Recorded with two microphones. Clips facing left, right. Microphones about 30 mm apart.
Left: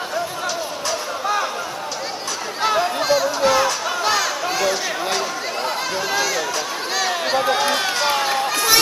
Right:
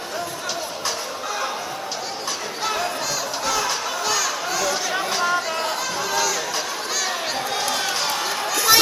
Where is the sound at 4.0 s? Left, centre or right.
Left.